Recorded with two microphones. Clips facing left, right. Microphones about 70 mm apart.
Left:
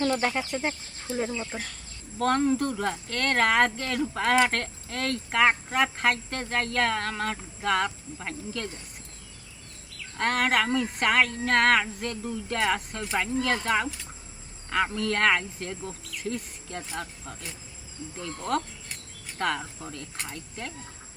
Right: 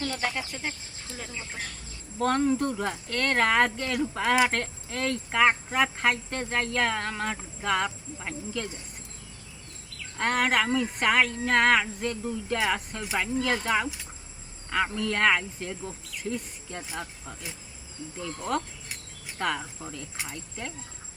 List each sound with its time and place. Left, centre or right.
0.5 s speech: left
2.1 s speech: centre
10.2 s speech: centre